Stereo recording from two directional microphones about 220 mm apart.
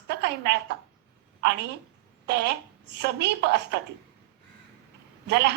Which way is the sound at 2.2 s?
50° right (ahead or behind).